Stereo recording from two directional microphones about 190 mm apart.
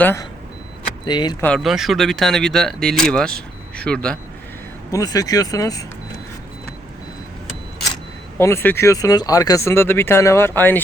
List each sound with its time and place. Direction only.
0.0 s speech: 15° left (ahead or behind)
1.4 s speech: 5° left (ahead or behind)
4.9 s speech: 20° left (ahead or behind)
8.4 s speech: 15° left (ahead or behind)